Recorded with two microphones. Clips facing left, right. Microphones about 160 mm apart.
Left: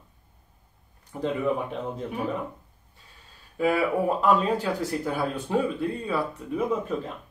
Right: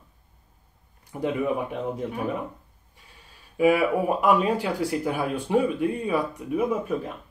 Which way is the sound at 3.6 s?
10° right (ahead or behind).